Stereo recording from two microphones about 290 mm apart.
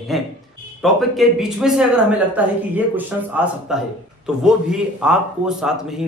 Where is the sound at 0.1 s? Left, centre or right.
Centre.